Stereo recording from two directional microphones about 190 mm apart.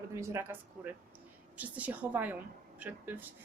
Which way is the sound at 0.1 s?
15° right (ahead or behind).